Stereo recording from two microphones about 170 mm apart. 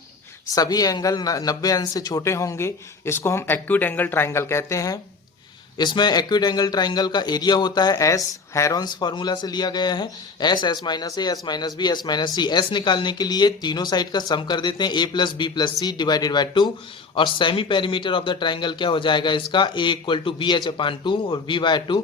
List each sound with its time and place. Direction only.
0.5 s a man's voice: 20° left (ahead or behind)